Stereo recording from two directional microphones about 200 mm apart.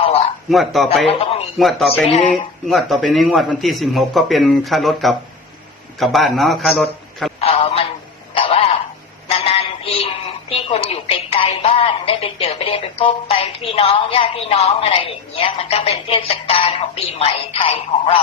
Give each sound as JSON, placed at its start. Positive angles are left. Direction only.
{"t": 0.5, "sound": "a man's voice", "side_deg": 0}
{"t": 1.0, "sound": "speech", "side_deg": 30}
{"t": 1.5, "sound": "a man's voice", "side_deg": 0}
{"t": 2.0, "sound": "speech", "side_deg": 30}
{"t": 2.6, "sound": "a man's voice", "side_deg": 0}
{"t": 7.4, "sound": "a sound", "side_deg": 30}